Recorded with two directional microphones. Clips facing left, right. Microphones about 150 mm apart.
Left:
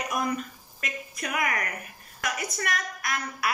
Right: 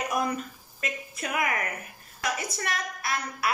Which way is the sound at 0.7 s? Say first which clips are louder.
Right 1 dB; 25° right (ahead or behind).